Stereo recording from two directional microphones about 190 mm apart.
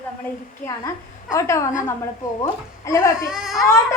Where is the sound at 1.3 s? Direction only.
15° left (ahead or behind).